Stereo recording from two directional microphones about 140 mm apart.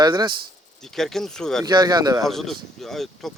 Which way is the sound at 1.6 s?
30° right (ahead or behind).